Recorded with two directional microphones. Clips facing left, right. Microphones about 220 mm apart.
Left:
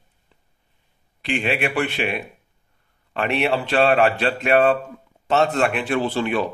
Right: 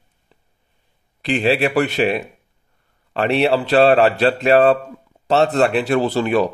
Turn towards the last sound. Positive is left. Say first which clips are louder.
# right 5 dB
turn(degrees=-40)  # may be behind; listen again after turning